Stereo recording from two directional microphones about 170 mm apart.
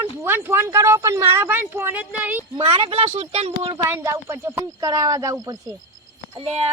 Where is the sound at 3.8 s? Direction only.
15° right (ahead or behind).